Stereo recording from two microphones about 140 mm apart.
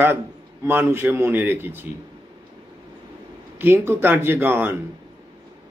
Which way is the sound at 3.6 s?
15° right (ahead or behind).